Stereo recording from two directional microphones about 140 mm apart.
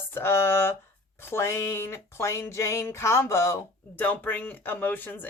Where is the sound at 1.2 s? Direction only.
20° left (ahead or behind).